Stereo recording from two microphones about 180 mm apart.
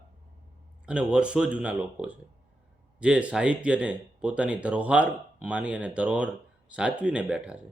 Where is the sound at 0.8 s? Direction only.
5° right (ahead or behind).